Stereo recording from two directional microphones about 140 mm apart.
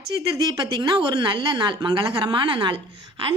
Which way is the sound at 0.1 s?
35° right (ahead or behind).